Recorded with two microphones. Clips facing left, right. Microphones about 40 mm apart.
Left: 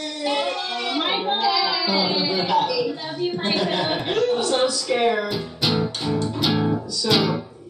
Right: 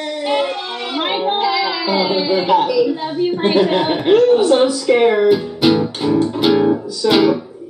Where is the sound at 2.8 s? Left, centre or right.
Centre.